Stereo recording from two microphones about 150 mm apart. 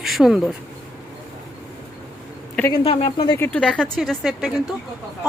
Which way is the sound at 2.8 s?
40° left (ahead or behind).